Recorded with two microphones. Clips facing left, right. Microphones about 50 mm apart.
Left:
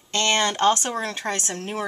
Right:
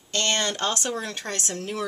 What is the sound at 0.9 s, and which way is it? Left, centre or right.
Speech, left.